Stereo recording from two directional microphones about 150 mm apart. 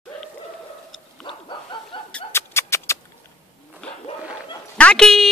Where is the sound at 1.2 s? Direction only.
30° left (ahead or behind).